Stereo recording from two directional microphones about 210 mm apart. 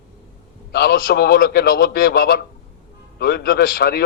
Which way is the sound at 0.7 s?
45° left (ahead or behind).